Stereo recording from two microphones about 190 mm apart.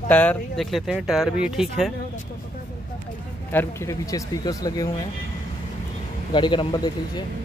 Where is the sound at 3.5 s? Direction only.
10° left (ahead or behind).